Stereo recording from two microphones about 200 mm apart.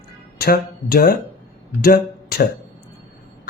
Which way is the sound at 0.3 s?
50° left (ahead or behind).